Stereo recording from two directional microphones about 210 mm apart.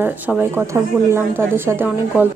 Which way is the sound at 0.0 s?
10° right (ahead or behind).